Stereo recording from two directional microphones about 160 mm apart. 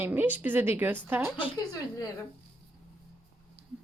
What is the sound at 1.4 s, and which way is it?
Speech, 25° left (ahead or behind).